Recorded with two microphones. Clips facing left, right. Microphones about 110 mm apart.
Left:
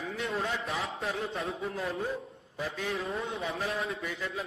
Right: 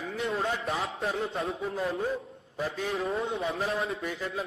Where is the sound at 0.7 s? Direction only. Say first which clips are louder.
Right 3 dB; 30° right (ahead or behind).